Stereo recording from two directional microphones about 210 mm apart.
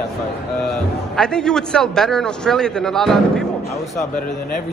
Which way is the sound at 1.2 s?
5° left (ahead or behind).